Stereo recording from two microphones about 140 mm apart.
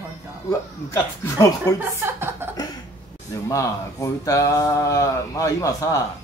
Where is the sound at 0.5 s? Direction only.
20° left (ahead or behind).